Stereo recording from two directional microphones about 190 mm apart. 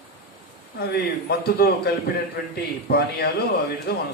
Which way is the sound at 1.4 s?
55° left (ahead or behind).